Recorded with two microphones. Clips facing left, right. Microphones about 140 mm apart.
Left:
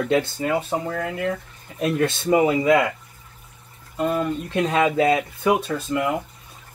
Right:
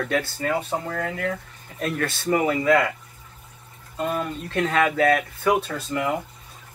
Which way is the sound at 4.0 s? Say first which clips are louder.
Left 3 dB; centre (ahead or behind).